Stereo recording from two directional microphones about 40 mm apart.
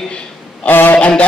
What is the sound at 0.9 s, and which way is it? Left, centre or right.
Speech, left.